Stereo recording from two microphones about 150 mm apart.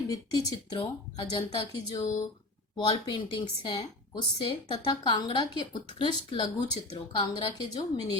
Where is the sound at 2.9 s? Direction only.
30° left (ahead or behind).